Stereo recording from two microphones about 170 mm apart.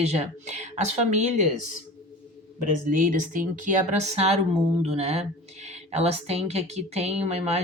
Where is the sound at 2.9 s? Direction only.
50° right (ahead or behind).